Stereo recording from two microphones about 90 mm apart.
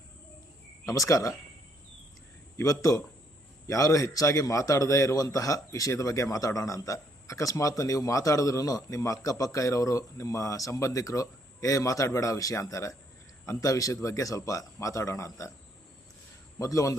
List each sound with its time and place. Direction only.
0.9 s a man's voice: 40° left (ahead or behind)
2.6 s a man's voice: 35° left (ahead or behind)
16.6 s a man's voice: 40° left (ahead or behind)